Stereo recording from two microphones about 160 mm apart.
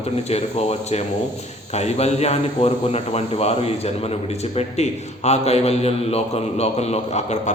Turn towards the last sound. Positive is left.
turn(degrees=45)  # may be behind; listen again after turning